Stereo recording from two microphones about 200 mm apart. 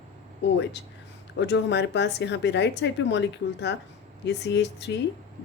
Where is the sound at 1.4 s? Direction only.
60° left (ahead or behind).